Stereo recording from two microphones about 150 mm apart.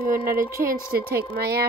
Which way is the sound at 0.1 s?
70° right (ahead or behind).